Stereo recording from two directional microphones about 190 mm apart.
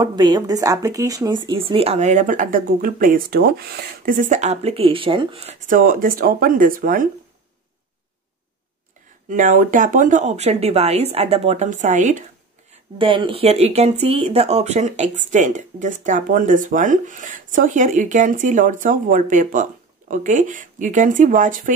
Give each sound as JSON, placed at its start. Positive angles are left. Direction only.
{"t": 0.0, "sound": "speech", "side_deg": -20}
{"t": 9.3, "sound": "speech", "side_deg": -45}
{"t": 12.9, "sound": "speech", "side_deg": -25}